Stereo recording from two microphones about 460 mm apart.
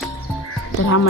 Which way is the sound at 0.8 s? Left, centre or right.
Left.